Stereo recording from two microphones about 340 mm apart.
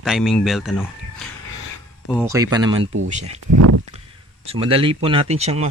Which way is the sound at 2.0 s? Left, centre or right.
Centre.